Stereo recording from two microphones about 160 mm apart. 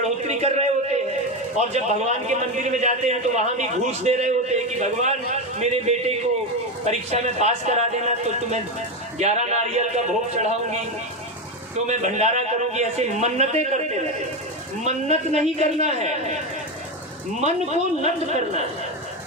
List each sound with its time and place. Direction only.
0.0 s a sound: 45° right (ahead or behind)
1.6 s a man's voice: 45° right (ahead or behind)
11.9 s a man's voice: 45° right (ahead or behind)
18.0 s a man's voice: 45° right (ahead or behind)